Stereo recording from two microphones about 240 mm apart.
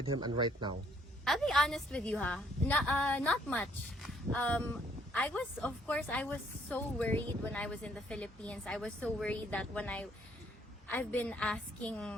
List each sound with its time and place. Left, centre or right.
0.0 s speech: centre
1.2 s a woman's voice: centre